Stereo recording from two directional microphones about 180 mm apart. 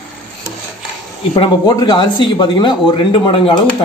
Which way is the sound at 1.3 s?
25° left (ahead or behind).